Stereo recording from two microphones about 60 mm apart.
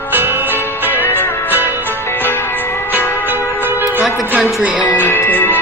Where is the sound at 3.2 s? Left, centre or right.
Right.